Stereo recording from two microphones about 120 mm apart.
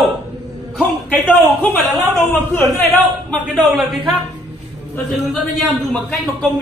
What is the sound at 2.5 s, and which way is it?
Speech, 20° left (ahead or behind).